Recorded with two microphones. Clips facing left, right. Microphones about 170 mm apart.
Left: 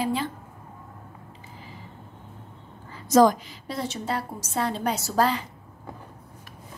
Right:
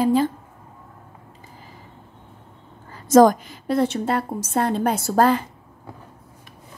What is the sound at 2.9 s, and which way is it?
A woman's voice, 45° right (ahead or behind).